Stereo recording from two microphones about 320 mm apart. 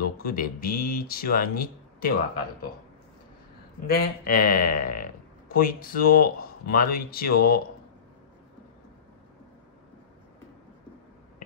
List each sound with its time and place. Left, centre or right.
0.0 s a man's voice: left
3.8 s a man's voice: left